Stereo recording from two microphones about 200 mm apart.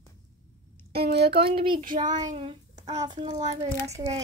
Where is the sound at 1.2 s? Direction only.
55° right (ahead or behind).